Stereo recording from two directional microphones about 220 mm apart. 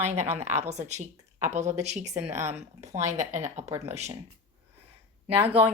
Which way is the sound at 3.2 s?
35° right (ahead or behind).